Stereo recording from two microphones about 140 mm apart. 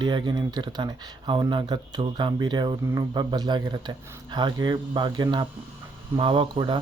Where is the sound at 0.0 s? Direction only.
35° right (ahead or behind).